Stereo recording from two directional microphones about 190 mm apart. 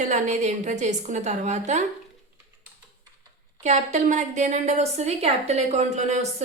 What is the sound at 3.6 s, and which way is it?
A woman's voice, 35° right (ahead or behind).